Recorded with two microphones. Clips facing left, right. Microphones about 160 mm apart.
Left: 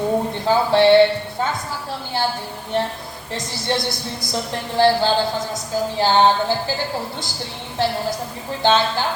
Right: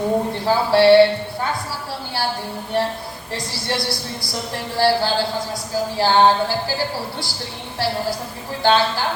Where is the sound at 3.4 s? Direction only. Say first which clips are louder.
Left 2 dB; 20° left (ahead or behind).